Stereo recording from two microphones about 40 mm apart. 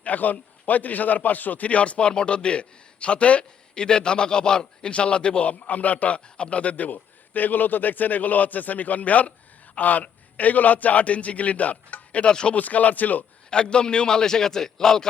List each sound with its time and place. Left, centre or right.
0.0 s a man's voice: left
12.2 s speech: left
12.5 s a man's voice: left
13.5 s a man's voice: left